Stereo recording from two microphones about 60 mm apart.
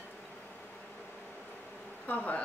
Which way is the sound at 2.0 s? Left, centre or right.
Left.